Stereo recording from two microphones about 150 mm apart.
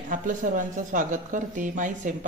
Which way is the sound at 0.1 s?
60° right (ahead or behind).